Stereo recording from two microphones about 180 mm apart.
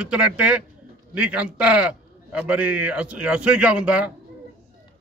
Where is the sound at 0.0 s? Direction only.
5° right (ahead or behind).